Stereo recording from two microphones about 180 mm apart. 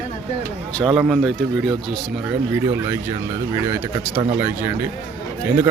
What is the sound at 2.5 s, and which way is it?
Speech, 15° right (ahead or behind).